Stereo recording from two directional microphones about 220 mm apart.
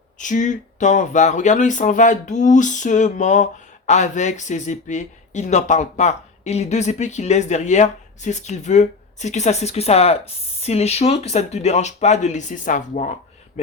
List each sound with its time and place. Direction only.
0.2 s speech: 35° left (ahead or behind)